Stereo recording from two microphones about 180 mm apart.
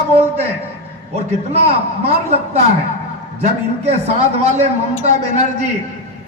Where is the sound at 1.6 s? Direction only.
35° right (ahead or behind).